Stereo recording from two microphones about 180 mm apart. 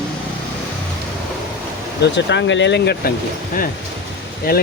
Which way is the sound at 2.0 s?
80° left.